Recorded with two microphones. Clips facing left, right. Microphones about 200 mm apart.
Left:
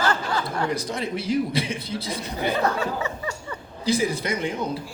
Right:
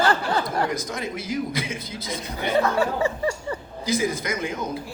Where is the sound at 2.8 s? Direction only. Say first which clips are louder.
Right 5 dB; 30° right (ahead or behind).